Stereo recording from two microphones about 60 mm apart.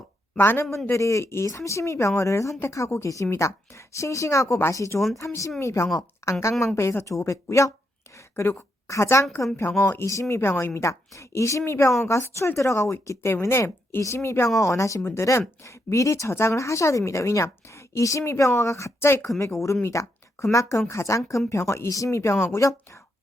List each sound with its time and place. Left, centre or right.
0.3 s speech: left
0.9 s speech: left
1.5 s a woman's voice: left
5.2 s speech: left
8.1 s a sound: left
8.9 s a woman's voice: left
10.8 s a woman's voice: left
14.6 s a woman's voice: left
15.0 s a woman's voice: left
20.8 s a woman's voice: left
21.8 s a woman's voice: left